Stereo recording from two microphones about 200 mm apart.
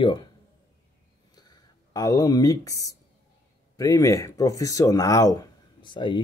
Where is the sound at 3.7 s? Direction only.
15° left (ahead or behind).